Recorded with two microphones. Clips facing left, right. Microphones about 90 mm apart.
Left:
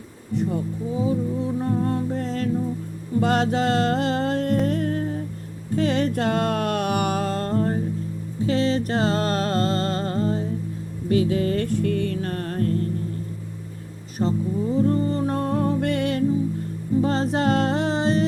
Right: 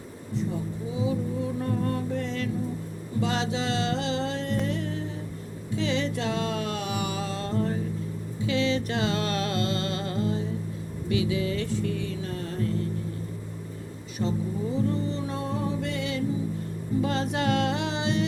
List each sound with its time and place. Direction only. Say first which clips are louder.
0.3 s speech: left 6 dB; 60° left (ahead or behind)
1.5 s music: left 6 dB; 30° left (ahead or behind)
3.2 s music: left 7 dB; 50° left (ahead or behind)
14.2 s a sound: left 5 dB; 45° left (ahead or behind)
14.8 s music: left 7 dB; 45° left (ahead or behind)
17.0 s music: left 5 dB; 35° left (ahead or behind)